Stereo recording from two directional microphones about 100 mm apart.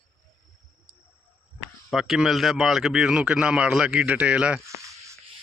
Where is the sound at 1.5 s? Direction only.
5° right (ahead or behind).